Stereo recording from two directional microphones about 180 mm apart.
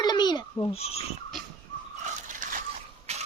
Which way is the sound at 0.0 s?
25° left (ahead or behind).